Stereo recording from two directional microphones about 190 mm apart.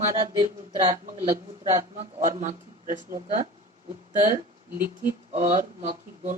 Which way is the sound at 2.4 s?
40° right (ahead or behind).